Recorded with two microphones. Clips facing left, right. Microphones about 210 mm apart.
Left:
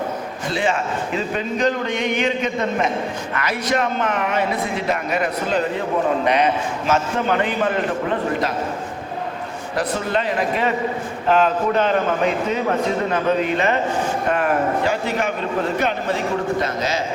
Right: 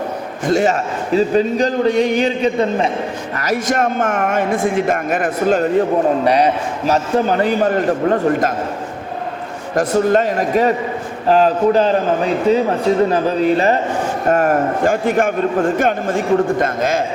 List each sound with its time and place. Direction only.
0.5 s a man's voice: 40° right (ahead or behind)
6.2 s a man's voice: 35° right (ahead or behind)
9.7 s a man's voice: 45° right (ahead or behind)